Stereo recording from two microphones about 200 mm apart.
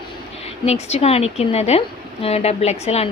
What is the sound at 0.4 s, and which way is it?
A woman's voice, 30° left (ahead or behind).